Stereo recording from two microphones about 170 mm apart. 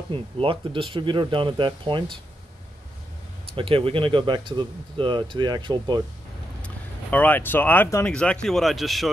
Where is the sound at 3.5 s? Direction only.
35° right (ahead or behind).